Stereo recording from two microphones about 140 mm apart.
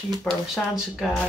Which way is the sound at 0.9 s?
Centre (ahead or behind).